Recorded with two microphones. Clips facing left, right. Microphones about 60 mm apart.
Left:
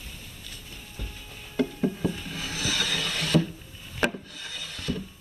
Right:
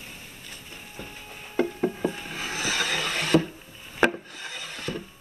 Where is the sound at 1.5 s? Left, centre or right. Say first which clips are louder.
Right 1 dB; right.